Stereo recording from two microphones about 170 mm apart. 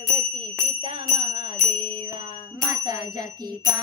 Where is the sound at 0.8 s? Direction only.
30° right (ahead or behind).